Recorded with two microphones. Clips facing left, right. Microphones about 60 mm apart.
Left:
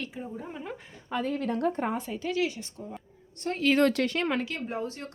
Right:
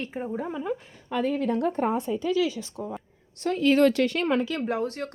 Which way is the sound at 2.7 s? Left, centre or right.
Right.